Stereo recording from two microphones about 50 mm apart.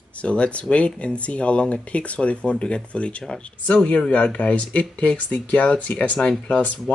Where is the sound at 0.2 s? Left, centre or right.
Left.